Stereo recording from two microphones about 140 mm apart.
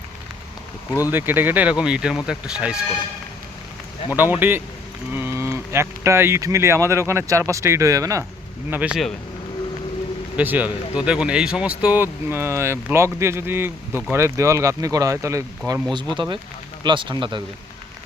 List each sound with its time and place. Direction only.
1.1 s speech: 15° right (ahead or behind)
4.1 s speech: 15° right (ahead or behind)
8.7 s speech: 10° right (ahead or behind)
10.3 s speech: 10° right (ahead or behind); by 17.4 s 35° right (ahead or behind)